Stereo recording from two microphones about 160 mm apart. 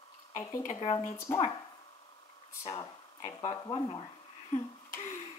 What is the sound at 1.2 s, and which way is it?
Speech, 15° left (ahead or behind).